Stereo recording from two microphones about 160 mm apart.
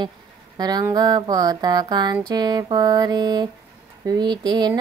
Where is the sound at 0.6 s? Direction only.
25° right (ahead or behind).